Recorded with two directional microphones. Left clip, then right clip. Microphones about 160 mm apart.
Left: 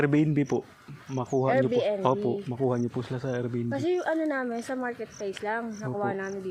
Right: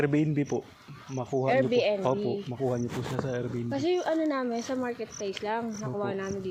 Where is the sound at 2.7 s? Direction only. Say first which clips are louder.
Left 1 dB; 40° left (ahead or behind).